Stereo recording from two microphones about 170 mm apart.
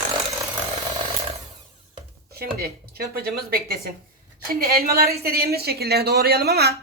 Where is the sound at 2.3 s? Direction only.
65° right (ahead or behind).